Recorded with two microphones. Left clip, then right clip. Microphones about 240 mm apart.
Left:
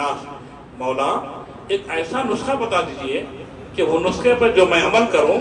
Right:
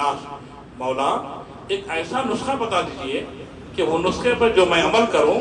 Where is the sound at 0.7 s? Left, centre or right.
Right.